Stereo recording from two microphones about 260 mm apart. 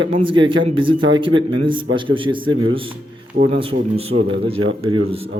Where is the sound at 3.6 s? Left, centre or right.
Right.